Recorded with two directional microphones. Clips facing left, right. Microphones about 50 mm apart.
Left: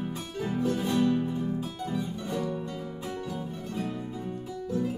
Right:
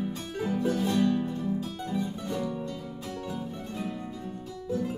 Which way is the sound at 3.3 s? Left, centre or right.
Centre.